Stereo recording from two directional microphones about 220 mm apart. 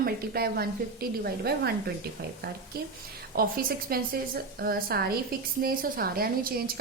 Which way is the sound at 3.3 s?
40° right (ahead or behind).